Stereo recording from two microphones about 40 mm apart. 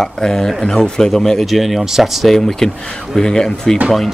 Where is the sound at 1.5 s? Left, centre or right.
Centre.